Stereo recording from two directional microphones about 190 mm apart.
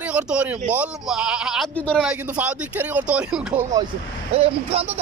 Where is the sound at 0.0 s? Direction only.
5° right (ahead or behind).